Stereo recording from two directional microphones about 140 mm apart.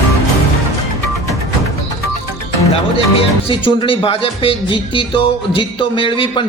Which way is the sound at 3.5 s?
35° left (ahead or behind).